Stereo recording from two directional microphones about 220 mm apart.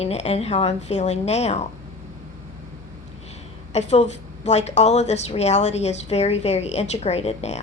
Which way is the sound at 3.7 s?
30° left (ahead or behind).